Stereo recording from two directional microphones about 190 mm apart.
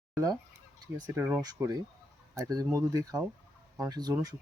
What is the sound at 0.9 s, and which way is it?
Speech, 15° right (ahead or behind).